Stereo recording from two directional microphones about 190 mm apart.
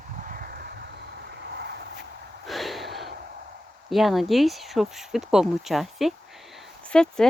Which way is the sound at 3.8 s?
Centre (ahead or behind).